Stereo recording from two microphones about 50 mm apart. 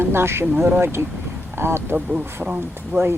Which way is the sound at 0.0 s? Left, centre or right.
Right.